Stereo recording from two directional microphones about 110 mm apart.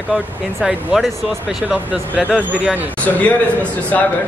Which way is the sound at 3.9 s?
15° left (ahead or behind).